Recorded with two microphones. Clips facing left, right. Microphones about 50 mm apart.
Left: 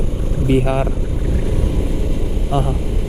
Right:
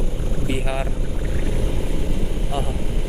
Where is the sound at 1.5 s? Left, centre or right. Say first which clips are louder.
Left 4 dB; centre.